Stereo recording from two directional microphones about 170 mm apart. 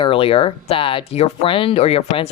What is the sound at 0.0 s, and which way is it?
Speech, 30° left (ahead or behind).